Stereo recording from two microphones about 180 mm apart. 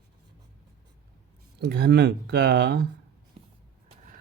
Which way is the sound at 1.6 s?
65° right (ahead or behind).